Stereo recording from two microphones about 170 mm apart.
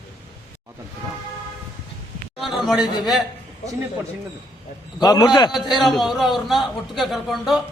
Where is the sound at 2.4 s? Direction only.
Centre (ahead or behind).